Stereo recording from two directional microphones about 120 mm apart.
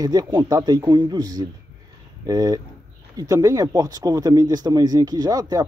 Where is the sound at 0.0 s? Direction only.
35° right (ahead or behind).